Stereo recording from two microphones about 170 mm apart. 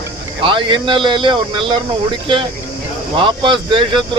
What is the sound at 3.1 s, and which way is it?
Speech, 30° right (ahead or behind).